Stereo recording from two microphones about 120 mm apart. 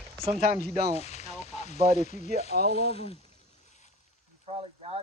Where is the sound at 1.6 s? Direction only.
75° left (ahead or behind); by 3.2 s 55° left (ahead or behind).